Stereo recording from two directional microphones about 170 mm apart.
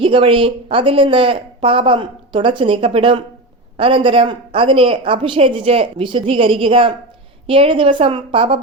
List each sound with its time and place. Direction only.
0.0 s a woman's voice: 30° right (ahead or behind)